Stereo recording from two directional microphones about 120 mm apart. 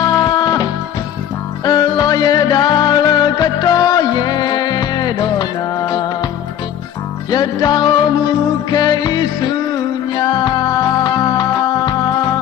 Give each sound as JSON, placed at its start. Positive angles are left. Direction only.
{"t": 0.0, "sound": "music", "side_deg": 35}
{"t": 7.2, "sound": "music", "side_deg": 35}